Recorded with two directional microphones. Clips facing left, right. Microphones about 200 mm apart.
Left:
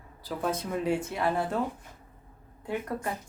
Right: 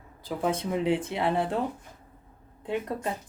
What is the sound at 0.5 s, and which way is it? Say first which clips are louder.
Speech: right 2 dB; 20° right (ahead or behind).